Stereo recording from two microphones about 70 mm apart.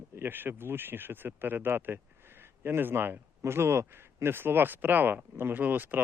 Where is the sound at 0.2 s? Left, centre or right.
Right.